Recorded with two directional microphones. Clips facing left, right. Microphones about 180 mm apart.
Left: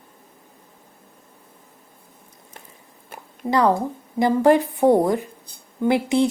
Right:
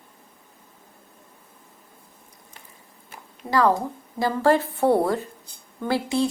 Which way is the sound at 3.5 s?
20° left (ahead or behind).